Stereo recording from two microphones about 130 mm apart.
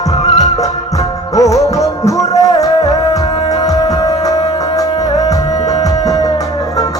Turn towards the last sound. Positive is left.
turn(degrees=25)  # may be behind; listen again after turning